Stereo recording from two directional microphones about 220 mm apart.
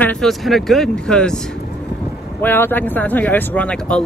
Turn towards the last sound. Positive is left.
turn(degrees=5)  # may be behind; listen again after turning